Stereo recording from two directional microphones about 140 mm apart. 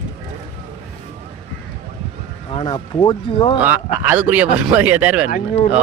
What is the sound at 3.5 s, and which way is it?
Speech, 15° right (ahead or behind).